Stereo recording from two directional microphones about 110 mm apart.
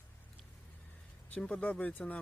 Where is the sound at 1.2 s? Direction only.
10° left (ahead or behind).